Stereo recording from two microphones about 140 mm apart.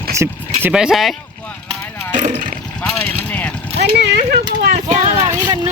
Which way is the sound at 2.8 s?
10° left (ahead or behind).